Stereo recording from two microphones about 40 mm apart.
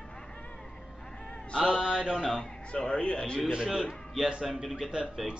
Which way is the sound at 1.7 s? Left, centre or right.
Centre.